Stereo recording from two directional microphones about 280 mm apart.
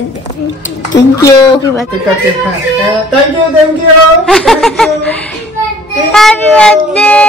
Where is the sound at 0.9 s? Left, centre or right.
Centre.